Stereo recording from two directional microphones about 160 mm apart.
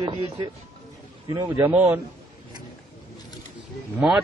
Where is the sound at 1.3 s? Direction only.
15° right (ahead or behind).